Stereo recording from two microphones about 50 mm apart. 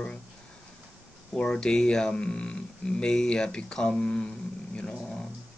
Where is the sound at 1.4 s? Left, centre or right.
Centre.